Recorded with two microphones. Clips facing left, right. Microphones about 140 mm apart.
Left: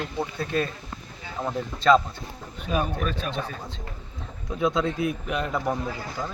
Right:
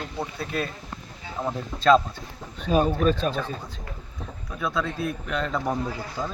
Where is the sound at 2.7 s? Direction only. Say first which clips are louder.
Right 6 dB; 30° right (ahead or behind).